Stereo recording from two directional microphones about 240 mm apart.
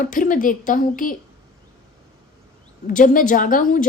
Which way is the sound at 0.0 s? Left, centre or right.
Left.